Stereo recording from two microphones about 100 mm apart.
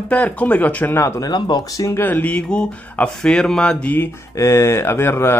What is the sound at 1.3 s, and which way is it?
Speech, 45° left (ahead or behind).